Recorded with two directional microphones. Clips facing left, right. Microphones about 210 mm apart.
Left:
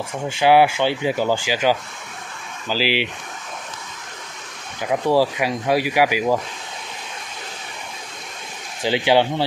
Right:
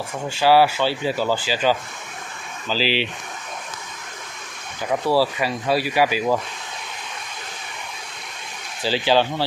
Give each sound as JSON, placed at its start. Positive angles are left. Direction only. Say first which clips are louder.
{"t": 0.4, "sound": "speech", "louder": "left 1 dB", "side_deg": 15}
{"t": 4.8, "sound": "speech", "louder": "left 2 dB", "side_deg": 15}
{"t": 8.8, "sound": "speech", "louder": "left 2 dB", "side_deg": 20}